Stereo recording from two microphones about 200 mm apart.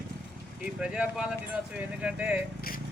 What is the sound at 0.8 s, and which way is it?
Speech, 5° right (ahead or behind).